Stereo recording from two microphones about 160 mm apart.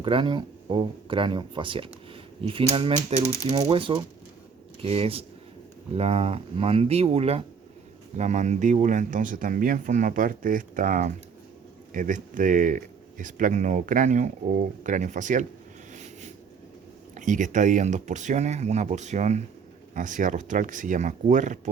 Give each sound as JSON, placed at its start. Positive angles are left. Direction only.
{"t": 0.0, "sound": "speech", "side_deg": -30}
{"t": 15.9, "sound": "a sound", "side_deg": -50}
{"t": 17.2, "sound": "speech", "side_deg": -50}